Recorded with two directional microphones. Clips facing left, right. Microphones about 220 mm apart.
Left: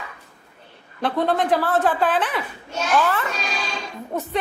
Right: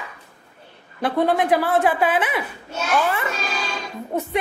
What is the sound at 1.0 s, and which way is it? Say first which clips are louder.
A woman's voice: right 2 dB; 10° right (ahead or behind).